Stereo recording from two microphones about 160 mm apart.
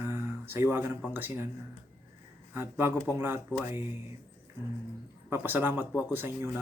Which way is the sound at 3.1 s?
15° right (ahead or behind).